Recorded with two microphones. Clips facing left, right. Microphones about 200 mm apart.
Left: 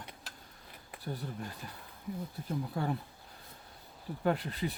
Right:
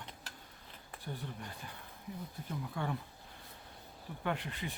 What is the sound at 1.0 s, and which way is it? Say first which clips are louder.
Speech: left 4 dB; 40° left (ahead or behind).